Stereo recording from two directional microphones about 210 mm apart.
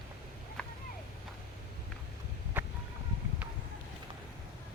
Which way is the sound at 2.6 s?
10° right (ahead or behind).